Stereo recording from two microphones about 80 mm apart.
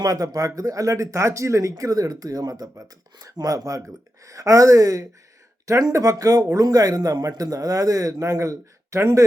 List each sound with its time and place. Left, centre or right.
0.0 s speech: right